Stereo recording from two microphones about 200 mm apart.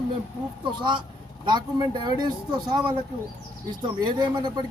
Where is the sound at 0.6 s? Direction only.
25° right (ahead or behind).